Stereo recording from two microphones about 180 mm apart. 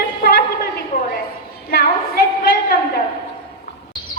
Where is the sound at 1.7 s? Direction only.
55° left (ahead or behind).